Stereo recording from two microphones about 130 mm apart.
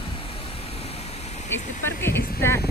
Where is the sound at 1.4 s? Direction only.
20° left (ahead or behind).